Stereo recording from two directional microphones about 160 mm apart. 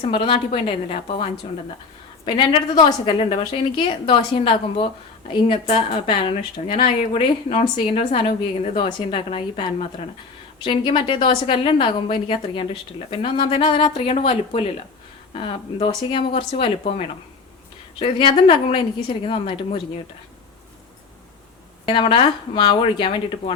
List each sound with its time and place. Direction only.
0.1 s a woman's voice: 35° left (ahead or behind)
21.8 s a woman's voice: 30° left (ahead or behind)